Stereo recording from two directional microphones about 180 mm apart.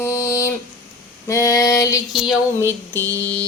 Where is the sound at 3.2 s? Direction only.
10° left (ahead or behind).